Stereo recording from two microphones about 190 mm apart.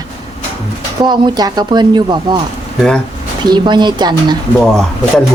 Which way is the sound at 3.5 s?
25° right (ahead or behind).